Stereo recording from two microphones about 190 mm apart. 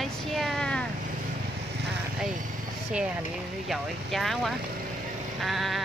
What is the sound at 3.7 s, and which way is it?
Speech, centre (ahead or behind).